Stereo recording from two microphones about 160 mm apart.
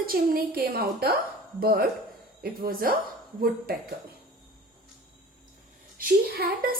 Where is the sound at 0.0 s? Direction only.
65° right (ahead or behind).